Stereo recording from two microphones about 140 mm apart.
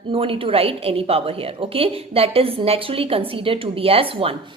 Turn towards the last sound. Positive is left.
turn(degrees=-40)  # may be behind; listen again after turning